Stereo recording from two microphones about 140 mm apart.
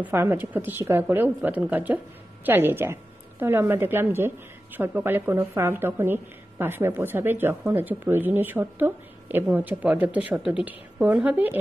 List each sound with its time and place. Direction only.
0.0 s a woman's voice: 15° right (ahead or behind)